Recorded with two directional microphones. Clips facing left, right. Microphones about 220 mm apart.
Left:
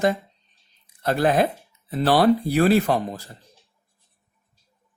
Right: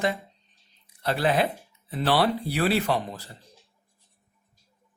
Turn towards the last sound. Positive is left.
turn(degrees=45)  # may be behind; listen again after turning